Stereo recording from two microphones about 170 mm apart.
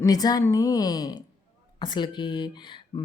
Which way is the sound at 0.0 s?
20° left (ahead or behind).